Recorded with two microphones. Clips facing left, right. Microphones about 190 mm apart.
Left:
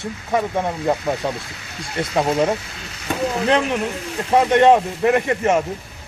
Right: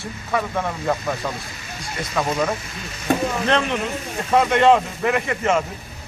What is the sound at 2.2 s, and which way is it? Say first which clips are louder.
Speech: left 4 dB; 25° left (ahead or behind).